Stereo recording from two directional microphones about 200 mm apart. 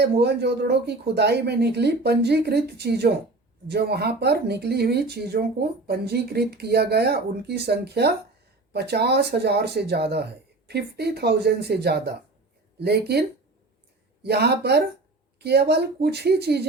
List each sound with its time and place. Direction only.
0.0 s speech: 55° right (ahead or behind)